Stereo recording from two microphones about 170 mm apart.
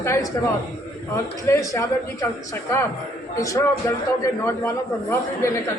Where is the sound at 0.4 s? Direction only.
15° left (ahead or behind).